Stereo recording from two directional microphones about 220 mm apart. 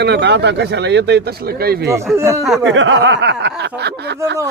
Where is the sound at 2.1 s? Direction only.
10° right (ahead or behind).